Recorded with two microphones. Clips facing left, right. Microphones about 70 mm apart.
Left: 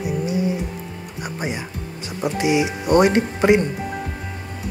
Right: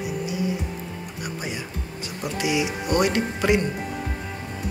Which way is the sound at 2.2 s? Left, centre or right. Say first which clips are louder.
Left 5 dB; left.